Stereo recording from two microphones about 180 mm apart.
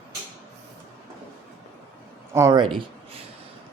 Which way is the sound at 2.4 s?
20° right (ahead or behind).